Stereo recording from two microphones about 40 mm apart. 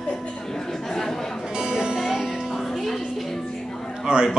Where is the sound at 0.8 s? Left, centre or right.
Centre.